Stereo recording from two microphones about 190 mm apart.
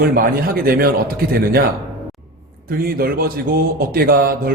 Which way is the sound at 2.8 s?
50° right (ahead or behind).